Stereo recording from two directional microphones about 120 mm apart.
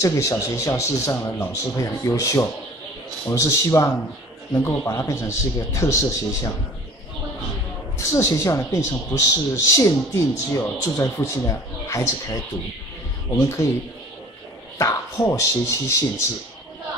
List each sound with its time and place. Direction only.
0.0 s speech: 25° left (ahead or behind)
8.0 s speech: 25° left (ahead or behind)
14.8 s speech: 25° left (ahead or behind)